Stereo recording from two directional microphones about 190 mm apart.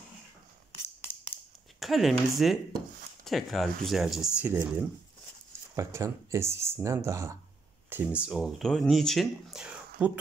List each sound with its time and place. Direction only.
1.8 s speech: centre (ahead or behind)